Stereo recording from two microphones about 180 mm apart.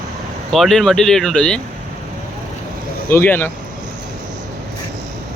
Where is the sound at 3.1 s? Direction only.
10° left (ahead or behind).